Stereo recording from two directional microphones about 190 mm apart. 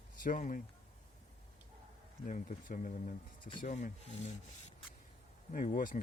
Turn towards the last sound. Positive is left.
turn(degrees=45)  # may be behind; listen again after turning